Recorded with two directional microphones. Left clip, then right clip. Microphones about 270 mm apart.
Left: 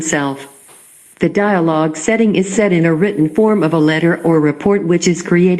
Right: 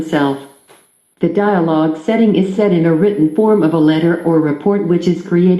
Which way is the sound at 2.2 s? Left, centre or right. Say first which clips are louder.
Right 2 dB; left.